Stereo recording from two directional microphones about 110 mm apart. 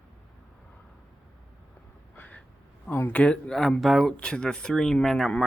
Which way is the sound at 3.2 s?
10° left (ahead or behind).